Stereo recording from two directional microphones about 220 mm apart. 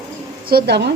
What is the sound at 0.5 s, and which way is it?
Speech, 50° right (ahead or behind).